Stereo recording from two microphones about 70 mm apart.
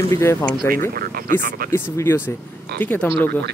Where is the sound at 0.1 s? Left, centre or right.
Left.